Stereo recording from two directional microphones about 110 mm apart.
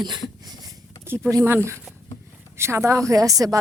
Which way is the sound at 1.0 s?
20° right (ahead or behind).